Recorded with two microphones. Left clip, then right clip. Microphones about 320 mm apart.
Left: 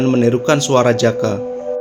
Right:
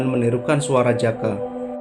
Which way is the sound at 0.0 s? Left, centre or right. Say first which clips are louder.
Left 6 dB; left.